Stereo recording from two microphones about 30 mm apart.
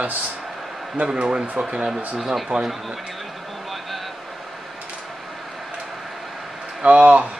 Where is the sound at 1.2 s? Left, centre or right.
Right.